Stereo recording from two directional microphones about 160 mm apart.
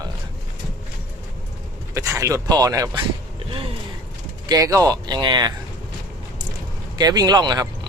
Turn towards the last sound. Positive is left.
turn(degrees=-25)  # may be behind; listen again after turning